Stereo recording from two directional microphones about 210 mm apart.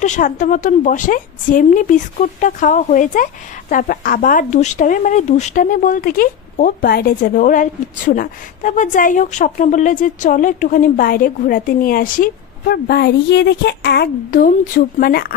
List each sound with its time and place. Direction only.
0.0 s a woman's voice: 35° left (ahead or behind)